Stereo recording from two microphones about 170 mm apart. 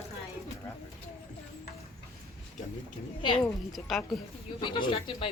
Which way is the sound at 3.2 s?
30° left (ahead or behind).